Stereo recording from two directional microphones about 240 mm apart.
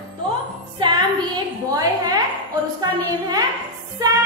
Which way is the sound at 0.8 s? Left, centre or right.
Centre.